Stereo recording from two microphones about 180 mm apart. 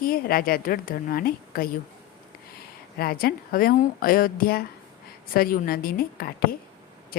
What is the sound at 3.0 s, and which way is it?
A woman's voice, 55° left (ahead or behind).